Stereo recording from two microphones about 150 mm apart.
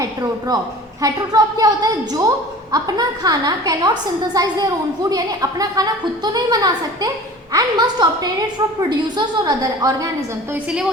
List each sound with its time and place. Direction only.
0.0 s a woman's voice: 25° right (ahead or behind)
10.5 s a woman's voice: 5° right (ahead or behind)